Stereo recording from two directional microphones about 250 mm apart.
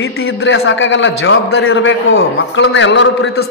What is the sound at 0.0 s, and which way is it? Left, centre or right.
A man's voice, left.